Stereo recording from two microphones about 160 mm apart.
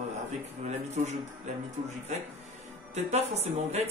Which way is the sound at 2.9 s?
40° right (ahead or behind).